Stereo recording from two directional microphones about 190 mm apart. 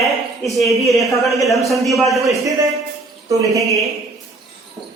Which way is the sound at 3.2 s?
15° right (ahead or behind).